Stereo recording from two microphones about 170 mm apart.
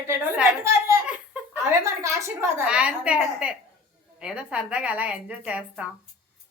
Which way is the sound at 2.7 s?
5° right (ahead or behind).